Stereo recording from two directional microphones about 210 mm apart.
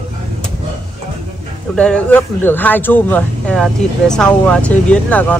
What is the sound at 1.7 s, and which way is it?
Speech, 5° left (ahead or behind).